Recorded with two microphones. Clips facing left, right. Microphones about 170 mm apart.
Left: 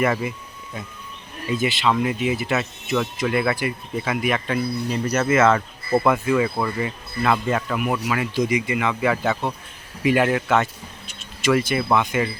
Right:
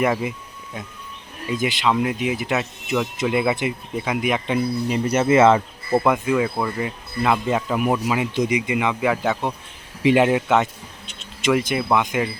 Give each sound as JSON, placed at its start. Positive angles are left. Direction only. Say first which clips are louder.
{"t": 0.0, "sound": "speech", "louder": "right 1 dB", "side_deg": -15}
{"t": 1.5, "sound": "speech", "louder": "even", "side_deg": -15}
{"t": 5.5, "sound": "speech", "louder": "right 1 dB", "side_deg": -10}
{"t": 6.4, "sound": "speech", "louder": "even", "side_deg": 0}
{"t": 10.0, "sound": "speech", "louder": "right 3 dB", "side_deg": -20}